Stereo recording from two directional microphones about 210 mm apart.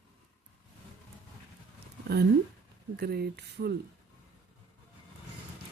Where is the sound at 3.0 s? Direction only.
50° right (ahead or behind).